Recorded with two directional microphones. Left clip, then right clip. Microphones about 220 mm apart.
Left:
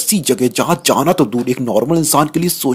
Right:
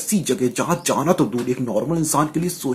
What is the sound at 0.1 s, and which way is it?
Speech, 40° left (ahead or behind).